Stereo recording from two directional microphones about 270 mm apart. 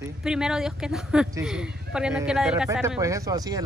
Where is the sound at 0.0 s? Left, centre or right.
Centre.